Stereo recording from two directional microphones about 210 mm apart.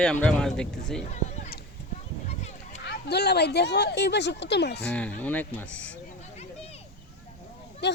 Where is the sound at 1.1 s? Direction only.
35° left (ahead or behind).